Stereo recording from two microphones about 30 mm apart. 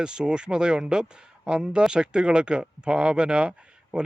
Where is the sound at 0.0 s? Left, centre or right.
Right.